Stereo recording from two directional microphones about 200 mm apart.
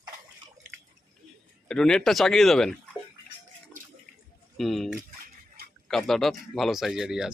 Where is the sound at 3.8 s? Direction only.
40° right (ahead or behind).